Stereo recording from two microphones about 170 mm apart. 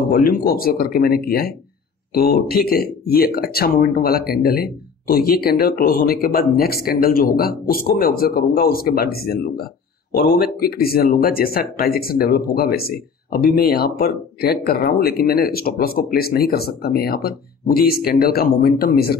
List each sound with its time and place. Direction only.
0.1 s speech: 60° left (ahead or behind)